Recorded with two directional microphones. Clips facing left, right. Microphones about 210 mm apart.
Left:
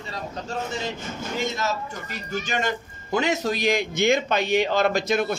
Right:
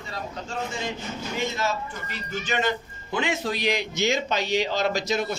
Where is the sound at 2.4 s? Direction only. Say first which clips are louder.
Right 3 dB; 45° left (ahead or behind).